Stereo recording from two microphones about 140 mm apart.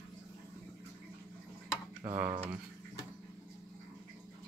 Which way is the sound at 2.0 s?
20° right (ahead or behind).